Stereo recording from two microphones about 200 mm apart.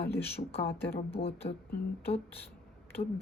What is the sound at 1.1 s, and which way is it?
Speech, 30° left (ahead or behind).